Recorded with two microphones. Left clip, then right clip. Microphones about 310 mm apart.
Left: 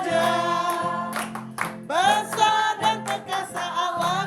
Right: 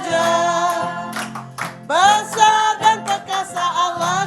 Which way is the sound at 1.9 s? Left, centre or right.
Centre.